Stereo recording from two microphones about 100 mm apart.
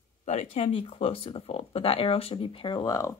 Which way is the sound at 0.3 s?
90° left.